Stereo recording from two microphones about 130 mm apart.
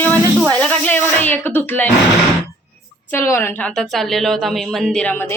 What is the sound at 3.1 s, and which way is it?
Speech, 20° left (ahead or behind).